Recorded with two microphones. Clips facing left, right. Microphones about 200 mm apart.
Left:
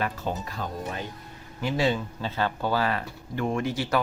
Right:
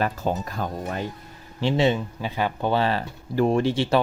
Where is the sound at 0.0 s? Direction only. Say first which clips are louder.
Right 5 dB; 45° right (ahead or behind).